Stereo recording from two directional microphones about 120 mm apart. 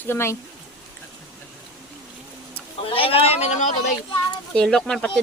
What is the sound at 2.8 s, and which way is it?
Speech, 50° left (ahead or behind).